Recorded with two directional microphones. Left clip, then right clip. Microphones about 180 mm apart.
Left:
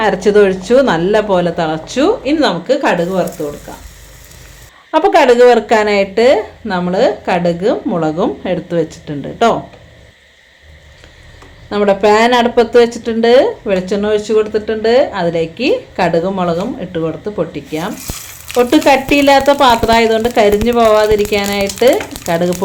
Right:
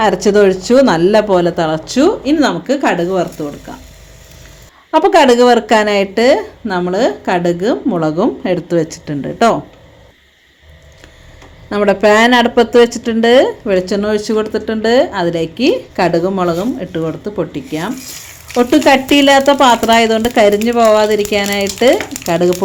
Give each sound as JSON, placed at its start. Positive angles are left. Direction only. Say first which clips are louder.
{"t": 0.0, "sound": "a woman's voice", "louder": "even", "side_deg": -35}
{"t": 4.9, "sound": "speech", "louder": "even", "side_deg": -35}
{"t": 11.7, "sound": "a woman's voice", "louder": "even", "side_deg": -40}